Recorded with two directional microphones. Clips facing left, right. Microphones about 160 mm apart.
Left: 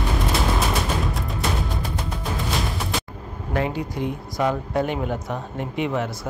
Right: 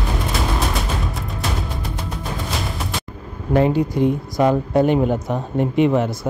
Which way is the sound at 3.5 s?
35° right (ahead or behind).